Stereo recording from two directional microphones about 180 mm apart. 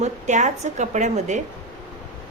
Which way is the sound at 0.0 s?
40° right (ahead or behind).